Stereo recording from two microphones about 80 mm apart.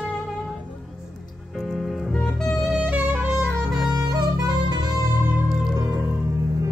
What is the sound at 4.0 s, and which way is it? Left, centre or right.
Music, right.